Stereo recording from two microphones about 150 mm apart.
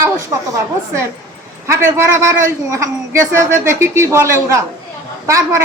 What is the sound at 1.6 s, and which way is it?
A woman's voice, 15° right (ahead or behind).